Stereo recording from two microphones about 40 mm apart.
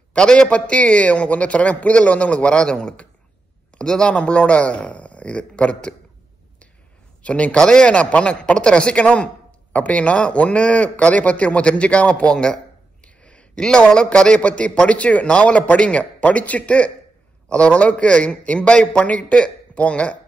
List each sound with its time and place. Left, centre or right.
0.1 s a man's voice: left
4.1 s speech: left
7.2 s speech: left
7.5 s a man's voice: centre
7.9 s speech: left
13.0 s a sound: left
13.6 s a man's voice: centre